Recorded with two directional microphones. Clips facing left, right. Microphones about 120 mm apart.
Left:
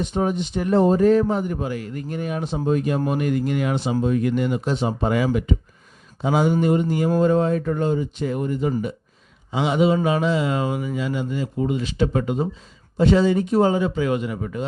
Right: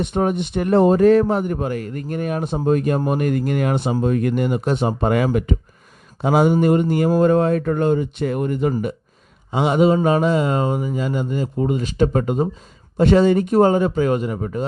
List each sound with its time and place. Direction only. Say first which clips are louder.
0.0 s speech: right 3 dB; 60° right (ahead or behind)
3.1 s mantra: right 2 dB; 50° right (ahead or behind)
6.2 s speech: right 4 dB; 55° right (ahead or behind)
9.5 s mantra: right 3 dB; 50° right (ahead or behind)
13.0 s mantra: right 3 dB; 55° right (ahead or behind)